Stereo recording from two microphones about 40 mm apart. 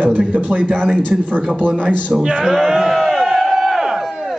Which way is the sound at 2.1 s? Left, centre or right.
Centre.